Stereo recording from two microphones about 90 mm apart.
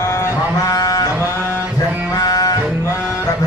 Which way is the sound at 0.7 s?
40° left (ahead or behind).